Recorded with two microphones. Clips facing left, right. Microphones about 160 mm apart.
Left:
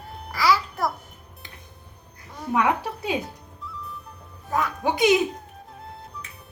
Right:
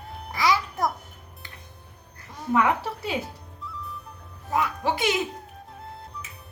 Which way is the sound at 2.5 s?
15° left (ahead or behind).